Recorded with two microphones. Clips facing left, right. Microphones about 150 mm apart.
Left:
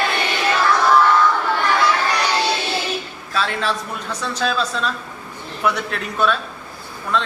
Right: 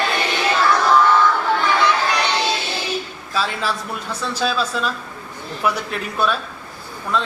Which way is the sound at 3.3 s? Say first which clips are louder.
Left 1 dB; 5° right (ahead or behind).